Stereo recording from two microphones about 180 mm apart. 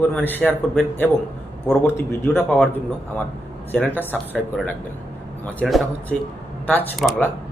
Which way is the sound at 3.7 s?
10° left (ahead or behind).